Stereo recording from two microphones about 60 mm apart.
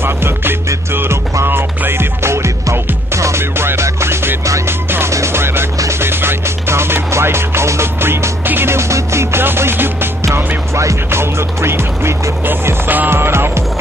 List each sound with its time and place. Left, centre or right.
0.0 s music: right